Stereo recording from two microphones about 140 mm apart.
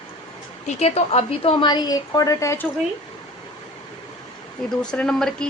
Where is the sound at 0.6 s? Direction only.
50° left (ahead or behind); by 2.7 s 20° left (ahead or behind).